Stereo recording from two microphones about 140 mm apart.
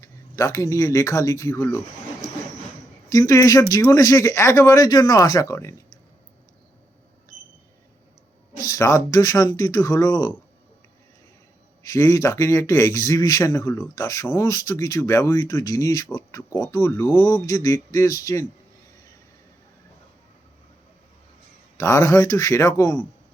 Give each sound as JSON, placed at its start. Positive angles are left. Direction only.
{"t": 0.0, "sound": "speech", "side_deg": 20}
{"t": 3.1, "sound": "speech", "side_deg": 25}
{"t": 8.5, "sound": "speech", "side_deg": 25}
{"t": 11.9, "sound": "speech", "side_deg": 25}
{"t": 21.8, "sound": "speech", "side_deg": 20}